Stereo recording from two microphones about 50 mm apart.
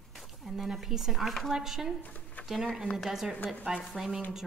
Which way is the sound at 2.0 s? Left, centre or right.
Left.